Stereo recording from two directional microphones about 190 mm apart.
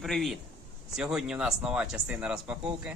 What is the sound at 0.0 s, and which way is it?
Speech, centre (ahead or behind).